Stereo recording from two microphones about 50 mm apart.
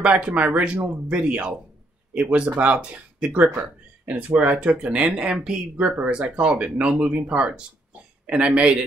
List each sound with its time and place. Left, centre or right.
0.0 s speech: right